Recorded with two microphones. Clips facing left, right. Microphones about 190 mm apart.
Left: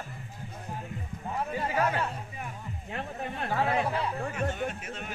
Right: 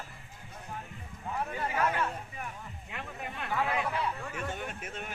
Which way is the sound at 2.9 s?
35° left (ahead or behind).